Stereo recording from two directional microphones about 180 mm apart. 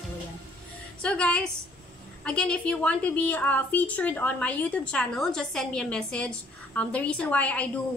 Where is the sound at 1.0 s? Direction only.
5° left (ahead or behind).